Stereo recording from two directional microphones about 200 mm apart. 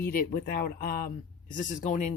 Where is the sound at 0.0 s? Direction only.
50° left (ahead or behind).